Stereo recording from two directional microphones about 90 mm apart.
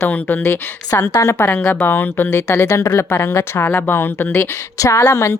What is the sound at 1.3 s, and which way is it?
Speech, 20° left (ahead or behind).